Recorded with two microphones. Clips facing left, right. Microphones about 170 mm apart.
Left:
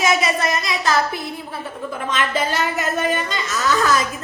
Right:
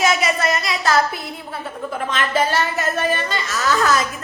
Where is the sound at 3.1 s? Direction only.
20° left (ahead or behind).